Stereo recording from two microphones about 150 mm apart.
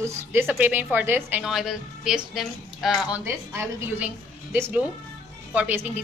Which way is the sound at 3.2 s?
15° right (ahead or behind).